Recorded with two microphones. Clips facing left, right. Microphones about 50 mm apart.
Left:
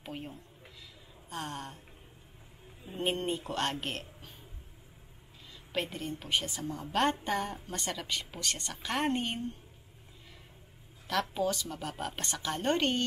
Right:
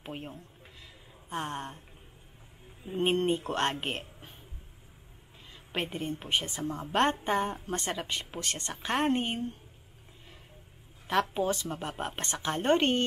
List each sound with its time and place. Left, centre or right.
0.0 s a woman's voice: right
2.8 s a woman's voice: right
5.5 s a woman's voice: right
9.0 s a woman's voice: centre
11.1 s a woman's voice: right